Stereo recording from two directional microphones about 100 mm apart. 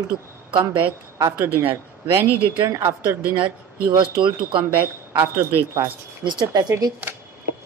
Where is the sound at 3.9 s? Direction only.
50° right (ahead or behind).